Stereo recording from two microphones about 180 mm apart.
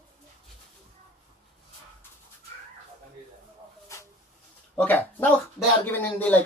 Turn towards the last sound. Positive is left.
turn(degrees=10)  # may be behind; listen again after turning